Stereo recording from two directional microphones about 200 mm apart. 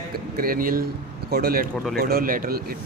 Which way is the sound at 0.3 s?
45° right (ahead or behind).